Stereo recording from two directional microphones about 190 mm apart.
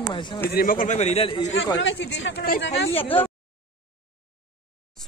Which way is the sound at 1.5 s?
80° left.